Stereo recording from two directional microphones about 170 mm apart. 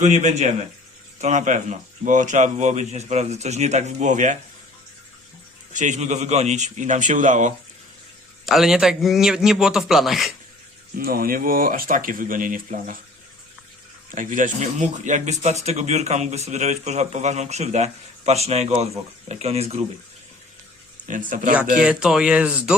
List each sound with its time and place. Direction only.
0.0 s speech: 45° right (ahead or behind)
5.7 s speech: 45° right (ahead or behind)
8.4 s a man's voice: centre (ahead or behind)
10.9 s speech: 60° right (ahead or behind)
14.2 s a man's voice: 50° right (ahead or behind)
21.1 s speech: 50° right (ahead or behind)
21.8 s a man's voice: 5° right (ahead or behind)